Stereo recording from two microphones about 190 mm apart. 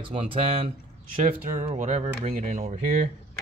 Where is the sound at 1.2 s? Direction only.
45° right (ahead or behind).